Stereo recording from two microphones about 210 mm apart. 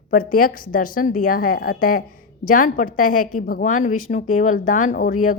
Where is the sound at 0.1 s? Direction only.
40° left (ahead or behind).